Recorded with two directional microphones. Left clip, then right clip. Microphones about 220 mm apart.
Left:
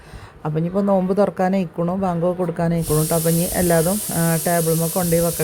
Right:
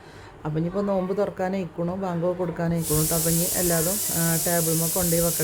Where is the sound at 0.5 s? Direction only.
20° left (ahead or behind).